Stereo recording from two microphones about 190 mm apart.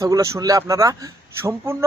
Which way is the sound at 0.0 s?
15° right (ahead or behind).